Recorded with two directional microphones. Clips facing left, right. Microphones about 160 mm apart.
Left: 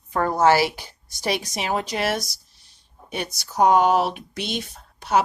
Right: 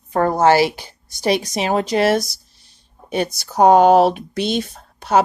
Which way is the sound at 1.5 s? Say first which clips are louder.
Right 7 dB; 30° right (ahead or behind).